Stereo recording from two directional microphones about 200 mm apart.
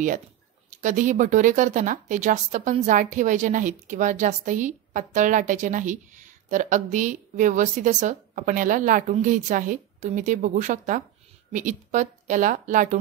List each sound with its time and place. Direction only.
0.7 s speech: 40° right (ahead or behind)